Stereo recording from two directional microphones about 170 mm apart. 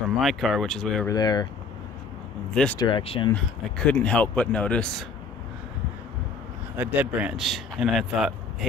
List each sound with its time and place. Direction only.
0.2 s a man's voice: centre (ahead or behind)
1.0 s speech: 25° left (ahead or behind)
2.5 s speech: 5° left (ahead or behind)
2.8 s speech: 30° left (ahead or behind)
3.3 s speech: 5° left (ahead or behind)
6.8 s a man's voice: 10° right (ahead or behind)